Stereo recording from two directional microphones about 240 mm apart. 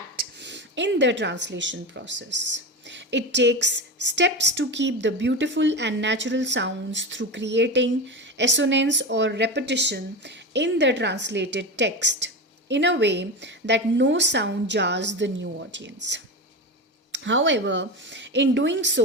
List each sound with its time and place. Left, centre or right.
0.2 s speech: right
17.1 s speech: right